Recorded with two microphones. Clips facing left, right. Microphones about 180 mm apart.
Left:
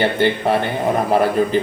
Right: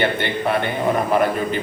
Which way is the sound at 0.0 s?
35° left (ahead or behind).